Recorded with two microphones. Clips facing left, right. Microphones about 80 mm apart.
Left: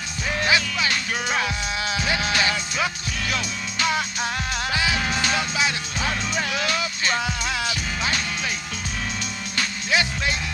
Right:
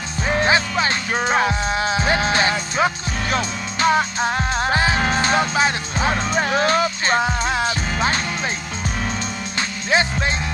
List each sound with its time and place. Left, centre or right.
0.3 s music: right
9.6 s music: right